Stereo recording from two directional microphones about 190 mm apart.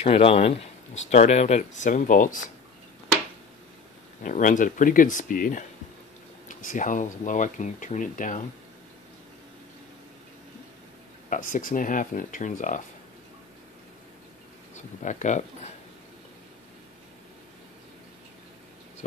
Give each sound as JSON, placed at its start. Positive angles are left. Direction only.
{"t": 0.0, "sound": "speech", "side_deg": 30}
{"t": 4.2, "sound": "speech", "side_deg": 45}
{"t": 11.2, "sound": "speech", "side_deg": 45}
{"t": 15.0, "sound": "speech", "side_deg": 40}